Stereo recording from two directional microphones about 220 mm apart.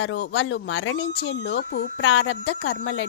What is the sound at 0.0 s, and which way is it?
Speech, 55° left (ahead or behind).